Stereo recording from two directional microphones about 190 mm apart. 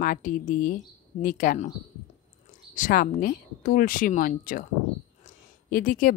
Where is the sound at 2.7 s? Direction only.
45° left (ahead or behind).